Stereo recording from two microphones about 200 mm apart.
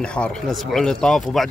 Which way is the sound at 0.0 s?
5° left (ahead or behind).